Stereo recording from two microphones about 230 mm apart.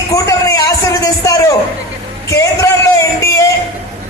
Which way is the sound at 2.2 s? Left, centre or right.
Centre.